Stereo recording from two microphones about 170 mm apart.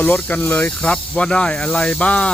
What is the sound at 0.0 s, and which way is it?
Speech, 10° left (ahead or behind).